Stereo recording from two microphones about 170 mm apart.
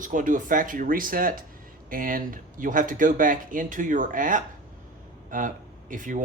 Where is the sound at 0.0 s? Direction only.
50° right (ahead or behind).